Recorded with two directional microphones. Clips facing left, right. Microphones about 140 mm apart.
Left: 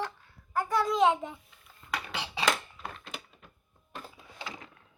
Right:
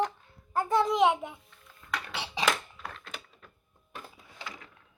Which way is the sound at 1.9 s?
10° left (ahead or behind).